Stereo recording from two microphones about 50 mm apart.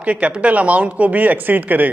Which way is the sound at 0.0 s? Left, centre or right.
Right.